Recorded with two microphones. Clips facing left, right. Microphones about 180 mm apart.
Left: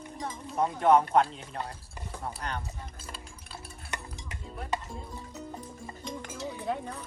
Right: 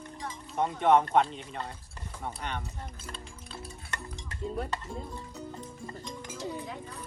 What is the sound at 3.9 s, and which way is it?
Music, 15° left (ahead or behind).